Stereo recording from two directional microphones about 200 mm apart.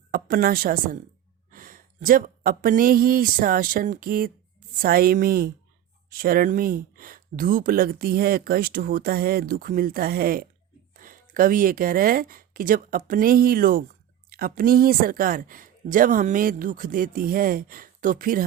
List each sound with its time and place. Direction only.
0.1 s a woman's voice: 45° right (ahead or behind)